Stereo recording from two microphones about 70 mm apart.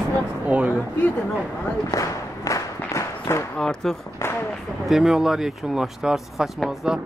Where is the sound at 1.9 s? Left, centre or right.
Left.